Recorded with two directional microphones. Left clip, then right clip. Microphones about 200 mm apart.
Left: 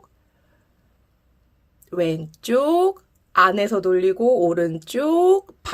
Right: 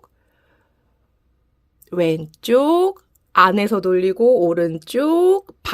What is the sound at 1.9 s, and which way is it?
Speech, 35° right (ahead or behind).